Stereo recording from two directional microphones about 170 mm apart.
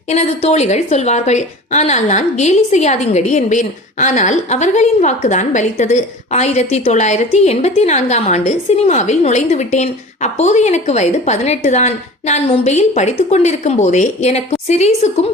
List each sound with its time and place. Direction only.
0.1 s a woman's voice: 40° left (ahead or behind)